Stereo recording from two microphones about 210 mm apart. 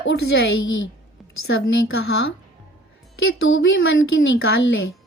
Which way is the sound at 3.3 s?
70° left (ahead or behind).